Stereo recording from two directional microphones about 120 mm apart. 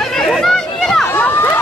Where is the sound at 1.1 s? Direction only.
20° left (ahead or behind).